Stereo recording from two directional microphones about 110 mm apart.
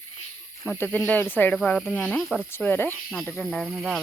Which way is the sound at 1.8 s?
15° left (ahead or behind).